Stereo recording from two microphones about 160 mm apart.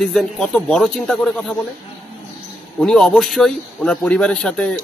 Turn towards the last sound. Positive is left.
turn(degrees=5)  # may be behind; listen again after turning